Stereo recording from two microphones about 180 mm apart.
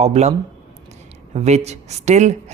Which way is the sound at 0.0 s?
40° right (ahead or behind).